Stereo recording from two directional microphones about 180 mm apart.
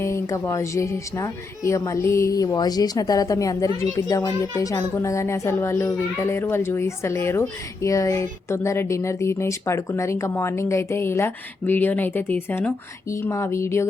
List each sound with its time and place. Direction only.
0.0 s speech: 15° left (ahead or behind)